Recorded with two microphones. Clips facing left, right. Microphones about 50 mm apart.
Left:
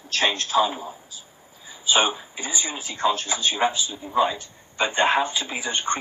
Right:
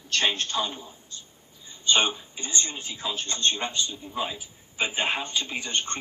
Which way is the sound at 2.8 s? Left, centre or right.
Left.